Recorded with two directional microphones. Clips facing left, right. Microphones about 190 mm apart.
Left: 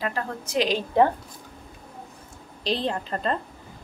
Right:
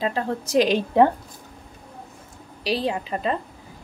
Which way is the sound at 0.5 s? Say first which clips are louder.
Right 5 dB; 45° right (ahead or behind).